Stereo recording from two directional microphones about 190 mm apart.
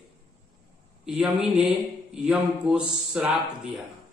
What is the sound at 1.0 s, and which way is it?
A man's voice, 5° right (ahead or behind).